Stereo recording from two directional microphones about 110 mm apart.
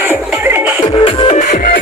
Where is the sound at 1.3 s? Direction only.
90° left.